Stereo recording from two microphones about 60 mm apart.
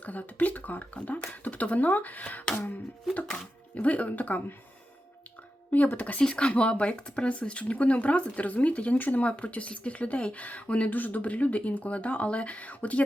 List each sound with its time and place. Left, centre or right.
0.0 s speech: left
3.8 s speech: left
5.7 s speech: left
6.2 s speech: centre